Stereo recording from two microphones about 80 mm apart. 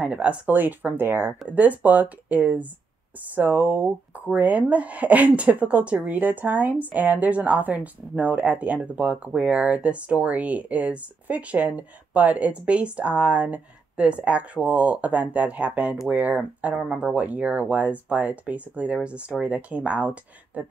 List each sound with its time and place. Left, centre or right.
0.0 s speech: centre